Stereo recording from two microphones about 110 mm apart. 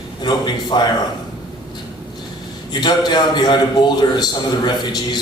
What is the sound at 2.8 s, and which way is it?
A man's voice, 40° left (ahead or behind).